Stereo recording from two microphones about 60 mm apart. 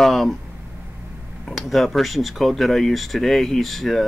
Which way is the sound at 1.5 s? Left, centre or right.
Centre.